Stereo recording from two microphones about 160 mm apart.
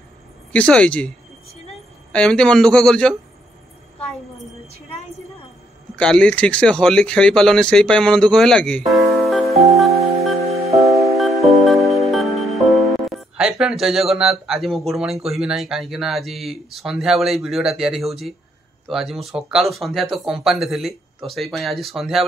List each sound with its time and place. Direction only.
0.5 s speech: 5° left (ahead or behind)
2.1 s speech: 5° left (ahead or behind)
5.9 s speech: 5° left (ahead or behind)
9.6 s music: centre (ahead or behind)
11.1 s music: centre (ahead or behind)
18.9 s speech: centre (ahead or behind)